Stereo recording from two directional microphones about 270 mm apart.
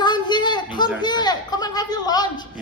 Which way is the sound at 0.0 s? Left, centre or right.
Centre.